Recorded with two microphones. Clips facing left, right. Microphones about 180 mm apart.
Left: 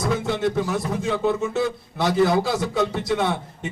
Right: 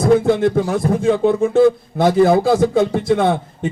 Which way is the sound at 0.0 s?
50° right (ahead or behind).